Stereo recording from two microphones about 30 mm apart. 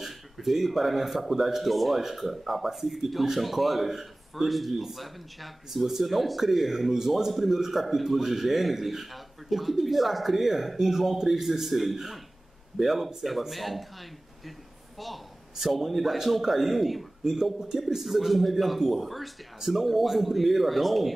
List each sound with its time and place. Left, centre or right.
0.0 s speech: centre
2.0 s a man's voice: centre
6.9 s a man's voice: centre
15.6 s a man's voice: centre
17.2 s speech: centre
18.0 s a man's voice: centre